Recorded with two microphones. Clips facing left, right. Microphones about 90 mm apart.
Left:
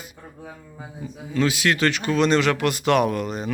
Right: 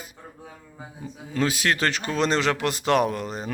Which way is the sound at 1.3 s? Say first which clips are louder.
Left 2 dB; 35° right (ahead or behind).